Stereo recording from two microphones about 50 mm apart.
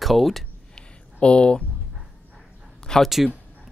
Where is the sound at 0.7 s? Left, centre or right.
Centre.